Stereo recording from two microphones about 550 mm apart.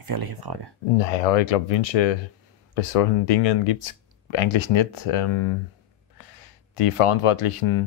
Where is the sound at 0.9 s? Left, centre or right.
Left.